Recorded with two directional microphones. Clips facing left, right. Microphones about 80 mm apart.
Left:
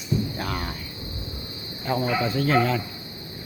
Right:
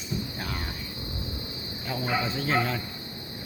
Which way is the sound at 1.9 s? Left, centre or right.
Left.